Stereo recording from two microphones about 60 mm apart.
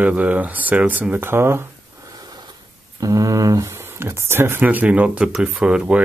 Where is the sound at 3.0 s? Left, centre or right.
Right.